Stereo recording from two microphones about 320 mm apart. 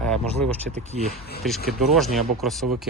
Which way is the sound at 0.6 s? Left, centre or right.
Right.